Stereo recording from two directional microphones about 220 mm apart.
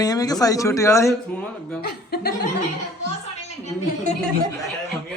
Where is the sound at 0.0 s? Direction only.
15° left (ahead or behind).